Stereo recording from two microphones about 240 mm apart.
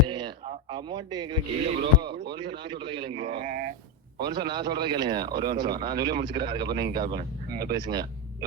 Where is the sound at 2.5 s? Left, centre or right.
Centre.